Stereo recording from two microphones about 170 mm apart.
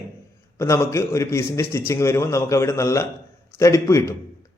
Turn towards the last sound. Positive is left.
turn(degrees=15)  # may be behind; listen again after turning